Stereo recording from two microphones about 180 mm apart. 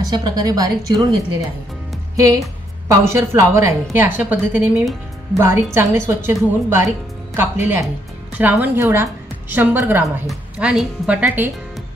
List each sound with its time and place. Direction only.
0.0 s a woman's voice: 20° right (ahead or behind)